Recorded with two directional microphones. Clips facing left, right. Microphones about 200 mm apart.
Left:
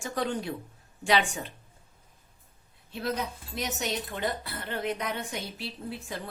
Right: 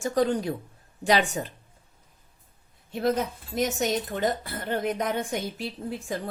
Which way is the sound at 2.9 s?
50° right (ahead or behind).